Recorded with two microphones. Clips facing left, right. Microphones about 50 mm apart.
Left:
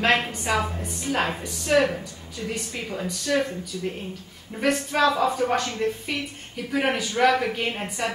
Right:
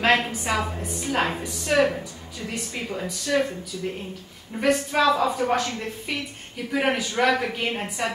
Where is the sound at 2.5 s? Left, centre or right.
Centre.